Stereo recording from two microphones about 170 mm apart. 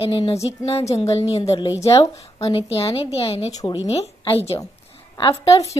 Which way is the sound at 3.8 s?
35° left (ahead or behind).